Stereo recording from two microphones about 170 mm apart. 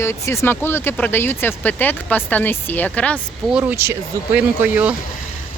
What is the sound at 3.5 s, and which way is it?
Speech, 10° right (ahead or behind).